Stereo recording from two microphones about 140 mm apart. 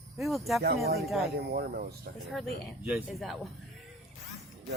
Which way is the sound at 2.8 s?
5° right (ahead or behind).